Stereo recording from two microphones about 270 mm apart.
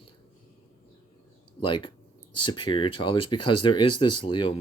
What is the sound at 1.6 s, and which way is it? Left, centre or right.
Speech, centre.